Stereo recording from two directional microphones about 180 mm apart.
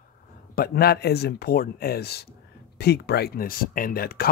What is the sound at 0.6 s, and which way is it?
Speech, 60° left (ahead or behind).